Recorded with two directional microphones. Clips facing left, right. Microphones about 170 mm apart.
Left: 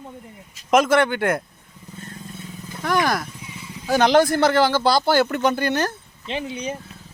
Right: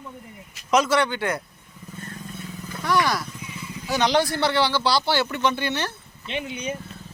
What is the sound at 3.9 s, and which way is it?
Speech, 50° left (ahead or behind).